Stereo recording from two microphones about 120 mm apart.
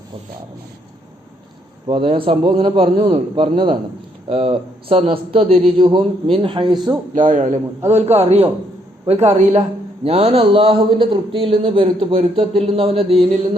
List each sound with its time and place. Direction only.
1.9 s a man's voice: 50° right (ahead or behind)
3.4 s a man's voice: 45° right (ahead or behind)
7.2 s a man's voice: 90° right
7.9 s a man's voice: 65° right (ahead or behind)
10.0 s a man's voice: 55° right (ahead or behind)